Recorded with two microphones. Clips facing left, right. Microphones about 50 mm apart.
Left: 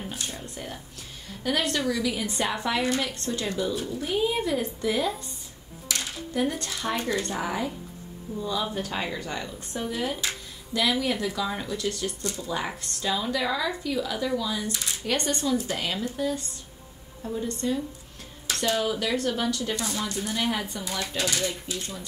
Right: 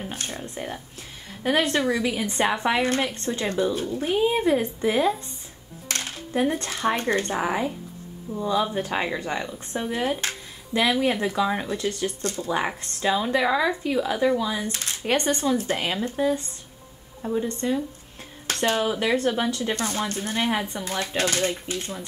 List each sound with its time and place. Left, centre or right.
0.1 s speech: right
0.4 s a woman's voice: right
5.9 s a sound: right
6.4 s a woman's voice: right
12.2 s speech: right
12.4 s a woman's voice: right
19.7 s a woman's voice: right
20.4 s a woman's voice: right